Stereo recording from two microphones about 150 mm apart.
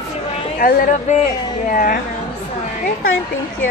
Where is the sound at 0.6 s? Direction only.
60° left (ahead or behind).